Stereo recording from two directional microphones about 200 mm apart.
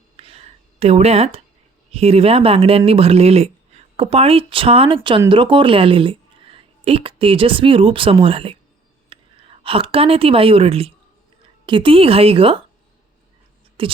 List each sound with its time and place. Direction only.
0.2 s a sound: 30° right (ahead or behind)
1.9 s a woman's voice: 30° right (ahead or behind)
13.8 s speech: 25° right (ahead or behind)